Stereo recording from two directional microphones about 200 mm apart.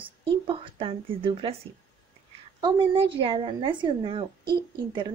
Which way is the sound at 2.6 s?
25° right (ahead or behind).